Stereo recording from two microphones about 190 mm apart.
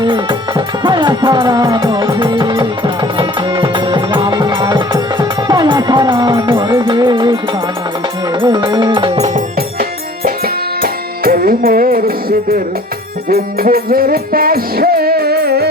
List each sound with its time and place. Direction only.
0.0 s music: 25° right (ahead or behind)
8.4 s music: 25° right (ahead or behind)
9.3 s music: 50° right (ahead or behind)